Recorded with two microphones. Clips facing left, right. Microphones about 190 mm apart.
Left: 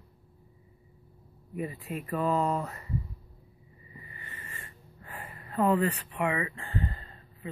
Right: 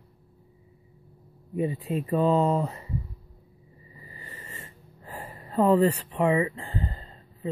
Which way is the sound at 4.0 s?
30° right (ahead or behind).